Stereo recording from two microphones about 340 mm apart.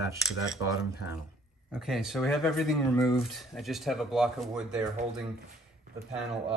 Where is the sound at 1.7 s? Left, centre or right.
Centre.